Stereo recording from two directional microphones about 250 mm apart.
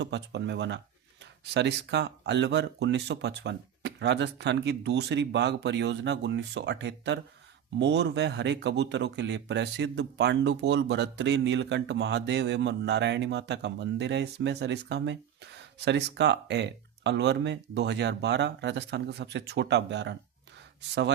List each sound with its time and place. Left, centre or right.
0.0 s speech: right